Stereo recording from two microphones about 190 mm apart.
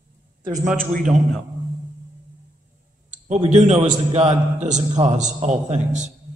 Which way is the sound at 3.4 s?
40° right (ahead or behind).